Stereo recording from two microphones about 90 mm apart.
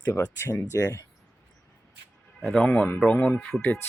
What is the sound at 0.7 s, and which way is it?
Speech, 45° left (ahead or behind).